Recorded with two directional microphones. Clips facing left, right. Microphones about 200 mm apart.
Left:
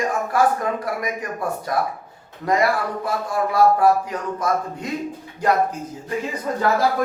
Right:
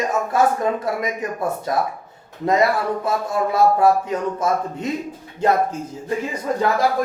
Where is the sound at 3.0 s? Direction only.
25° right (ahead or behind).